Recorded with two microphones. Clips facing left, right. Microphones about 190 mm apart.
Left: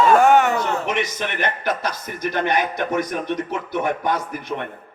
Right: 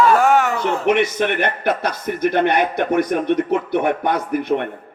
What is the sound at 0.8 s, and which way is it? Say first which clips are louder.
A man's voice: right 8 dB; 60° right (ahead or behind).